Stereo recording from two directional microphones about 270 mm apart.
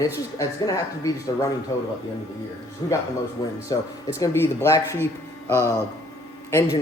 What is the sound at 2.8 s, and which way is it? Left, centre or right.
Speech, centre.